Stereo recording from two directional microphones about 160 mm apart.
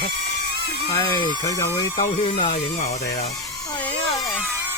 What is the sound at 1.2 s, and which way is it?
Speech, 30° right (ahead or behind).